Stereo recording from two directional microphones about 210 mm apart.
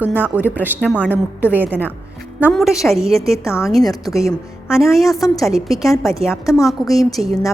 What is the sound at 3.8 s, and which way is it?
Speech, 15° left (ahead or behind).